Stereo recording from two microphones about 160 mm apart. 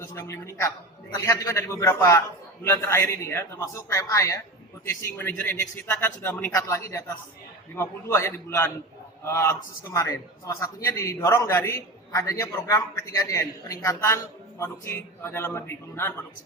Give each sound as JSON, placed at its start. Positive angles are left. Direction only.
{"t": 0.0, "sound": "a man's voice", "side_deg": 15}